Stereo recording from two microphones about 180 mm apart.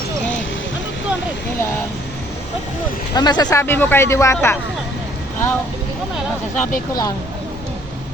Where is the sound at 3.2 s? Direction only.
25° left (ahead or behind).